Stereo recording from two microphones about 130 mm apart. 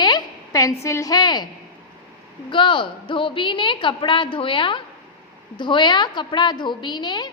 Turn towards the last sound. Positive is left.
turn(degrees=35)  # may be behind; listen again after turning